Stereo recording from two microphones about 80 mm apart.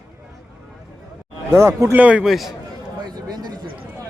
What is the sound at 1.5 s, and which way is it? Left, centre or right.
Speech, right.